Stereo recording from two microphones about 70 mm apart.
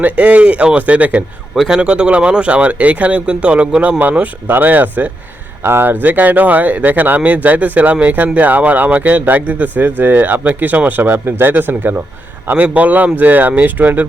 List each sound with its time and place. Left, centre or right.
0.0 s speech: centre
1.5 s speech: centre; by 14.1 s right